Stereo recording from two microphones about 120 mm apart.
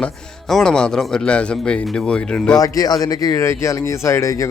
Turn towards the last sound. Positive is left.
turn(degrees=25)  # may be behind; listen again after turning